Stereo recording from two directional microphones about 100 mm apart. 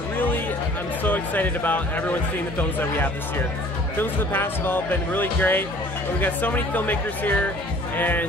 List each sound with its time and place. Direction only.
1.0 s speech: 15° left (ahead or behind)
4.0 s speech: 20° left (ahead or behind)